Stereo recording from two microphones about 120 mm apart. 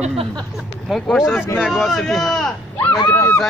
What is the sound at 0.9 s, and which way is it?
Speech, centre (ahead or behind).